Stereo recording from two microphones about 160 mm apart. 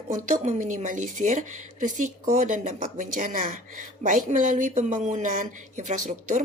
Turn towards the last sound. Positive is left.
turn(degrees=-50)  # may be behind; listen again after turning